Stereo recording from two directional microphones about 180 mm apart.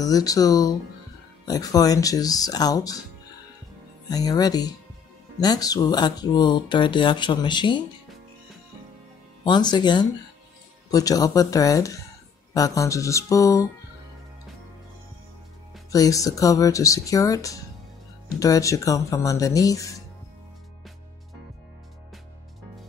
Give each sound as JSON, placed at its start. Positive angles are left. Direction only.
{"t": 0.0, "sound": "speech", "side_deg": 20}
{"t": 4.1, "sound": "speech", "side_deg": 20}
{"t": 9.4, "sound": "speech", "side_deg": 25}
{"t": 15.9, "sound": "speech", "side_deg": 20}